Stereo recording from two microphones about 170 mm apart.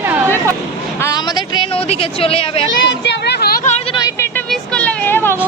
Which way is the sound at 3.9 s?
20° left (ahead or behind).